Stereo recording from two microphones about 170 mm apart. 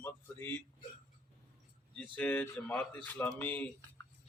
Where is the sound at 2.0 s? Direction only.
5° left (ahead or behind).